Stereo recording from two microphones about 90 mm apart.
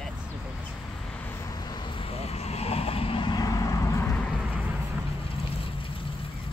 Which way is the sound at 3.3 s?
40° left (ahead or behind).